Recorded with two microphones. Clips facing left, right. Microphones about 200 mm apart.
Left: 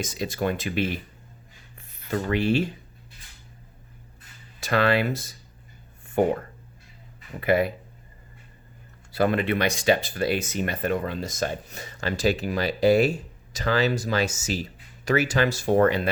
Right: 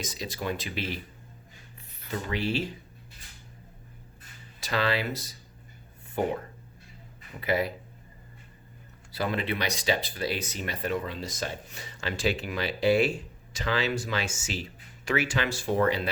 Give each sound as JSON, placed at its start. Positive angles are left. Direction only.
{"t": 0.0, "sound": "speech", "side_deg": 50}
{"t": 2.0, "sound": "speech", "side_deg": 50}
{"t": 4.6, "sound": "speech", "side_deg": 55}
{"t": 7.4, "sound": "speech", "side_deg": 55}
{"t": 9.1, "sound": "speech", "side_deg": 55}